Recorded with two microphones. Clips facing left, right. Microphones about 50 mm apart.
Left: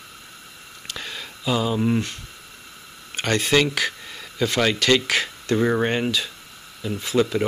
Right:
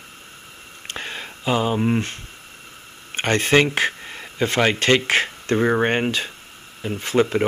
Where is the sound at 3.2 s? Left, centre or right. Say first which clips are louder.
Right 3 dB; right.